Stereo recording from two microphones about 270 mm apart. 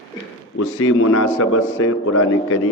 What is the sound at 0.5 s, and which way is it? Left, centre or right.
A man's voice, left.